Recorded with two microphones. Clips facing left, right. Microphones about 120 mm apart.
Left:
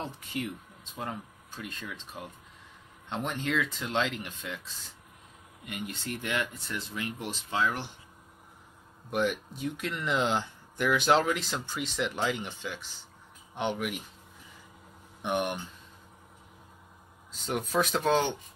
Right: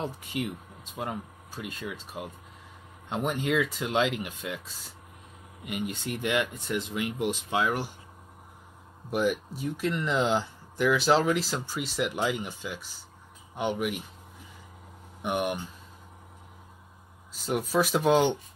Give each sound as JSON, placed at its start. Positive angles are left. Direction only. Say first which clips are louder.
{"t": 0.0, "sound": "speech", "louder": "right 3 dB", "side_deg": -15}
{"t": 5.7, "sound": "speech", "louder": "right 4 dB", "side_deg": -15}
{"t": 9.1, "sound": "speech", "louder": "right 2 dB", "side_deg": -5}
{"t": 15.2, "sound": "speech", "louder": "right 1 dB", "side_deg": -10}
{"t": 17.3, "sound": "speech", "louder": "right 3 dB", "side_deg": -5}